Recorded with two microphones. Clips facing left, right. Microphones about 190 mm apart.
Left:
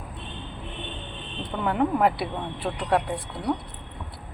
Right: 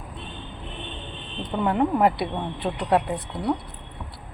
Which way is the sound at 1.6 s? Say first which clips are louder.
Right 2 dB; centre (ahead or behind).